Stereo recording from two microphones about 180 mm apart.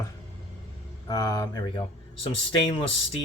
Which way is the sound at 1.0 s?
20° left (ahead or behind).